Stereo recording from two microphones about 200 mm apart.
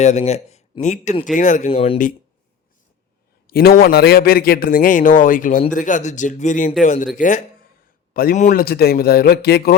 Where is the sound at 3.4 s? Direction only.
50° left (ahead or behind).